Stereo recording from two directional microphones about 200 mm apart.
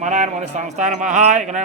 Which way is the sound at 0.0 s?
35° right (ahead or behind).